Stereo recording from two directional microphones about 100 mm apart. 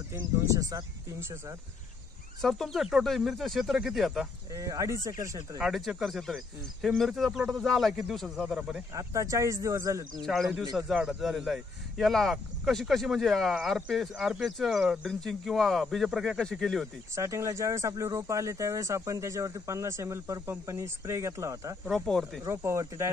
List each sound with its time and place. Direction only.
0.2 s speech: 40° right (ahead or behind)
2.4 s speech: centre (ahead or behind)
4.6 s speech: 35° right (ahead or behind)
5.6 s speech: centre (ahead or behind)
8.9 s speech: 35° right (ahead or behind)
10.2 s speech: centre (ahead or behind)
17.1 s speech: 30° right (ahead or behind)
21.8 s speech: 5° left (ahead or behind)
22.5 s speech: 30° right (ahead or behind)